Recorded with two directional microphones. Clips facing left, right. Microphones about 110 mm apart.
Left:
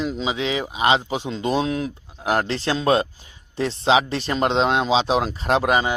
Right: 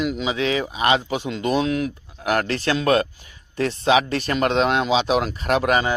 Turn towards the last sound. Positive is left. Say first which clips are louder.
# even
turn(degrees=25)  # may be behind; listen again after turning